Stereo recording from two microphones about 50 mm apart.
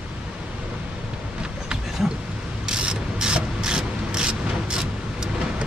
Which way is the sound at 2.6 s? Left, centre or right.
Centre.